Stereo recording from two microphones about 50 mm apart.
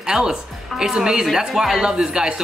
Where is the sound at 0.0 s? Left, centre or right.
Centre.